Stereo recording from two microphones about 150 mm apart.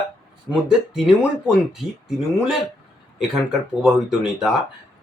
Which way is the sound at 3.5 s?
5° right (ahead or behind).